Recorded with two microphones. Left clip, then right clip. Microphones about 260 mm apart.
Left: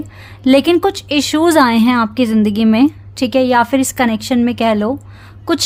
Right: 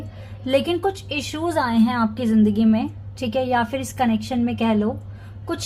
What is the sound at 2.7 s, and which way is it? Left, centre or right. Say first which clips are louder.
A woman's voice: left 13 dB; left.